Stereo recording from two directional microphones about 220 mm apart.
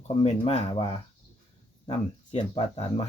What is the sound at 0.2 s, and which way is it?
Speech, 30° left (ahead or behind).